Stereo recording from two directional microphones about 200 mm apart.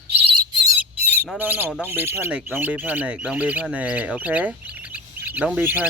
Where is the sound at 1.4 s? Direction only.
10° right (ahead or behind).